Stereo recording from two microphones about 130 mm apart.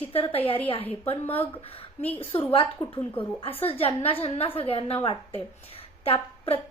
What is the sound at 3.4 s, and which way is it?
A woman's voice, 45° left (ahead or behind).